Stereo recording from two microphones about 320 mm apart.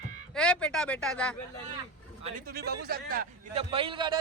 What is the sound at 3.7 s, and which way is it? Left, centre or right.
Speech, centre.